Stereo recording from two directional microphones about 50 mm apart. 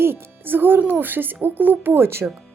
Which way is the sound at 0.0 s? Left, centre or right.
Right.